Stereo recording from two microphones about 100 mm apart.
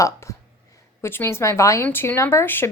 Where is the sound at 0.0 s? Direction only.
30° left (ahead or behind).